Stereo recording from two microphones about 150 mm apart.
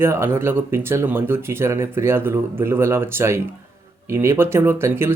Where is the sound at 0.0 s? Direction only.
15° right (ahead or behind).